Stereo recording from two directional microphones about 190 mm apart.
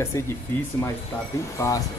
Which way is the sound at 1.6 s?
15° left (ahead or behind).